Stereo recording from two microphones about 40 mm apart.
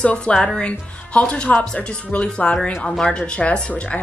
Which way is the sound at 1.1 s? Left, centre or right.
Left.